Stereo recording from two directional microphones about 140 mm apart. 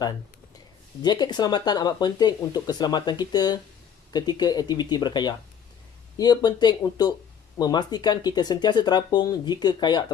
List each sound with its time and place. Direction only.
1.0 s speech: 30° left (ahead or behind)